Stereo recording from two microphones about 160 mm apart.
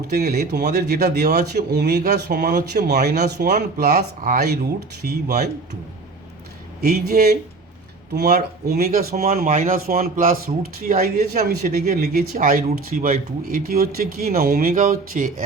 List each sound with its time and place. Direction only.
0.1 s speech: 80° right
6.8 s a man's voice: 75° right (ahead or behind)
9.3 s a man's voice: 55° right (ahead or behind)